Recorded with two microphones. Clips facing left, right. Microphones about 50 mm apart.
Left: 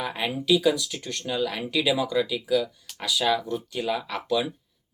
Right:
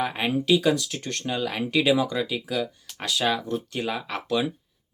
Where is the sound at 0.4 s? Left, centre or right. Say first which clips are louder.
Even; right.